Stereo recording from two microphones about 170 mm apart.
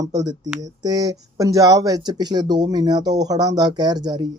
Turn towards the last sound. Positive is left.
turn(degrees=-25)  # may be behind; listen again after turning